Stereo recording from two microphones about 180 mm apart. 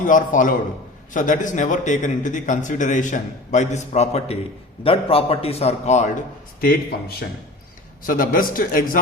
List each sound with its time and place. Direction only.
0.0 s a man's voice: 45° left (ahead or behind)
6.6 s a man's voice: 60° left (ahead or behind)